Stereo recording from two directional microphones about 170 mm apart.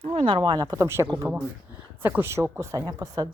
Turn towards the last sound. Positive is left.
turn(degrees=-20)  # may be behind; listen again after turning